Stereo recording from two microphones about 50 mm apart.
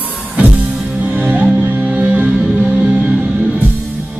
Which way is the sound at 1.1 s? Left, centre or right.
Right.